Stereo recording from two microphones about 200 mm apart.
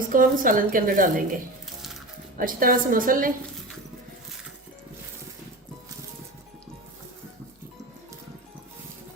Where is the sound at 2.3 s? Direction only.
45° right (ahead or behind).